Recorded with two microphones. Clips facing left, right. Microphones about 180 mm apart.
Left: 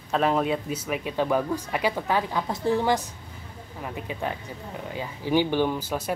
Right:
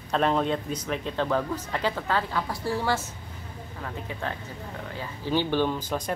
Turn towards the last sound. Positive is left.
turn(degrees=15)  # may be behind; listen again after turning